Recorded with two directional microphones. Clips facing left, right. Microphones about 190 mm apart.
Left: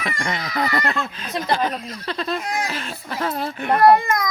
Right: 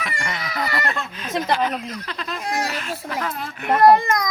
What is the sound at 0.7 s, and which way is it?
Speech, 20° left (ahead or behind).